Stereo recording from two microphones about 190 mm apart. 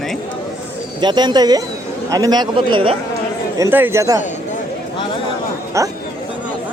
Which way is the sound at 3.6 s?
10° right (ahead or behind).